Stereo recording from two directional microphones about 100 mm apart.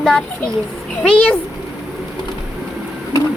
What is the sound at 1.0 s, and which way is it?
Child singing, 10° left (ahead or behind).